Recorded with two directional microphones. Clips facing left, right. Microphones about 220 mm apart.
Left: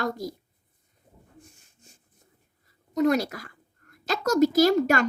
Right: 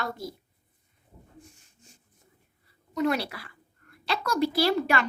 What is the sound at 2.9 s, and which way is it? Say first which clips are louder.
A child's voice: left 4 dB; 40° left (ahead or behind).